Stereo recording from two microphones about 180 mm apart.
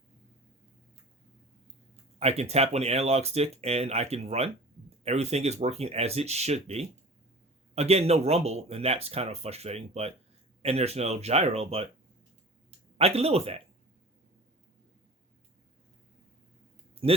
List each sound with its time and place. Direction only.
2.1 s speech: 35° right (ahead or behind)
13.0 s speech: 35° right (ahead or behind)
16.9 s a sound: 35° right (ahead or behind)